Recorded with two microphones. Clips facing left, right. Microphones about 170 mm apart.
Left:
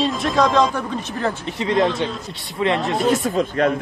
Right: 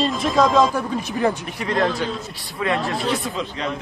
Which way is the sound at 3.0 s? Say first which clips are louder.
Left 6 dB; 45° left (ahead or behind).